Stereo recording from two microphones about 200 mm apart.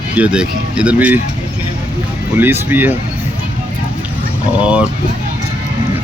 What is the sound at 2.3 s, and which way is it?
Speech, 10° right (ahead or behind).